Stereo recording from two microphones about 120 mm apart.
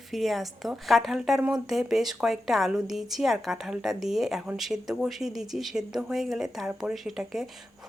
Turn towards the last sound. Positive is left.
turn(degrees=0)  # may be behind; listen again after turning